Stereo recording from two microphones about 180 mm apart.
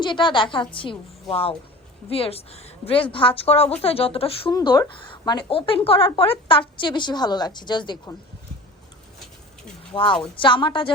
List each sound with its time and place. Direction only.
0.0 s a woman's voice: 25° left (ahead or behind)
4.5 s a woman's voice: 20° left (ahead or behind)
9.9 s a woman's voice: 30° left (ahead or behind)